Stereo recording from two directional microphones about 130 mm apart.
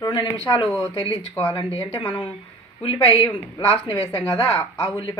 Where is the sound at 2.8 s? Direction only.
45° left (ahead or behind).